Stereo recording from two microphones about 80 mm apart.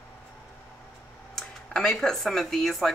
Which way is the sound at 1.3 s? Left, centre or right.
Centre.